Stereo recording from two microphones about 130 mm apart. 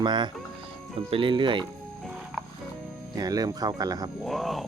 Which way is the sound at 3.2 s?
30° right (ahead or behind).